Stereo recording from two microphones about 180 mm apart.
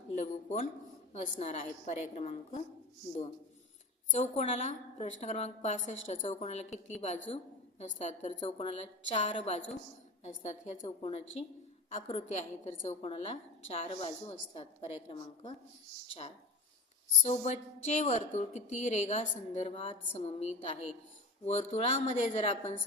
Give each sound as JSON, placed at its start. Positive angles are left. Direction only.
{"t": 0.2, "sound": "a sound", "side_deg": 40}
{"t": 1.1, "sound": "a woman's voice", "side_deg": 35}
{"t": 4.1, "sound": "a woman's voice", "side_deg": 40}
{"t": 17.2, "sound": "a woman's voice", "side_deg": 40}